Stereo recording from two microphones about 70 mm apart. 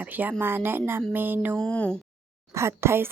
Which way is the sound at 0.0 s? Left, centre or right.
Right.